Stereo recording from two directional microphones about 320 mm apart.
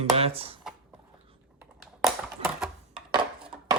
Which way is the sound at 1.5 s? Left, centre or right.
Centre.